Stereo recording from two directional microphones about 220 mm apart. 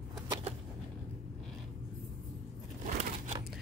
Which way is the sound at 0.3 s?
25° right (ahead or behind).